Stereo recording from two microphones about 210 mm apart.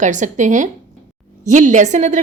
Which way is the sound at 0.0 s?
35° right (ahead or behind).